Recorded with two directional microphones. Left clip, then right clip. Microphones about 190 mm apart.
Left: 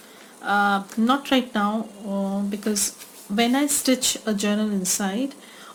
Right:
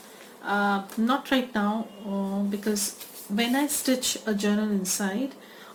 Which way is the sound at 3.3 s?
60° left (ahead or behind).